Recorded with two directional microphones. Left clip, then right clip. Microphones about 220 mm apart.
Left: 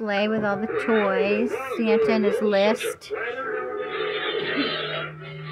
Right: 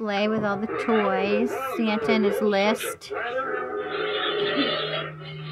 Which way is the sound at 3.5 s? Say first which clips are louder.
Even; 55° right (ahead or behind).